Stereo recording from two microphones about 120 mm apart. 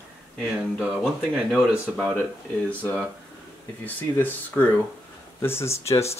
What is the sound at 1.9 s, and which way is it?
Speech, 5° left (ahead or behind).